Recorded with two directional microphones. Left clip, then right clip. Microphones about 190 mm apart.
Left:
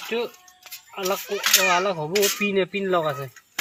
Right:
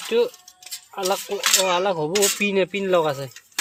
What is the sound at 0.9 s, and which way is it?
Speech, 55° right (ahead or behind).